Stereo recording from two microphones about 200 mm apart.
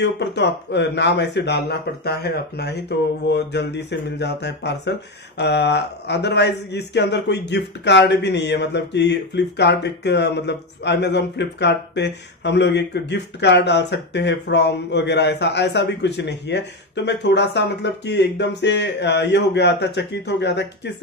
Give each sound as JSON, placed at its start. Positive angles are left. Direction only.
{"t": 0.0, "sound": "speech", "side_deg": 60}